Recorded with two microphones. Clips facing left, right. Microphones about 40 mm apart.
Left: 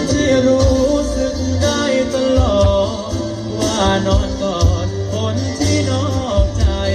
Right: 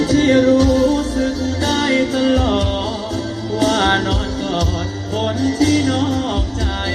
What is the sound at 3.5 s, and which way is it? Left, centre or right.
Music, right.